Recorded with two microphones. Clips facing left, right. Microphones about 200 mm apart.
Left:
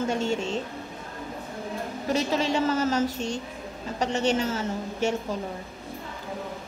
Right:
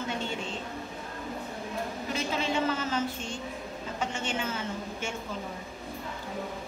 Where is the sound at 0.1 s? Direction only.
45° left (ahead or behind).